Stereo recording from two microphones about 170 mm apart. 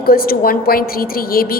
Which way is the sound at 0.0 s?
60° left (ahead or behind).